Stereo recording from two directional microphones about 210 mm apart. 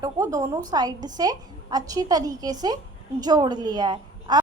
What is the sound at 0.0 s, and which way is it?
A woman's voice, 15° right (ahead or behind).